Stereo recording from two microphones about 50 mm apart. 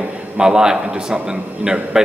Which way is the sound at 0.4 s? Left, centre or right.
Centre.